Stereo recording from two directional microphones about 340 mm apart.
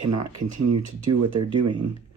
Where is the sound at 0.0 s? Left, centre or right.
Right.